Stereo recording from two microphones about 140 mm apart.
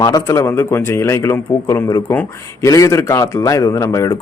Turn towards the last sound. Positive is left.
turn(degrees=25)  # may be behind; listen again after turning